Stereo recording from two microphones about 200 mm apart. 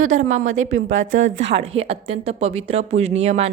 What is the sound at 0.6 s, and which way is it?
Speech, 75° right (ahead or behind).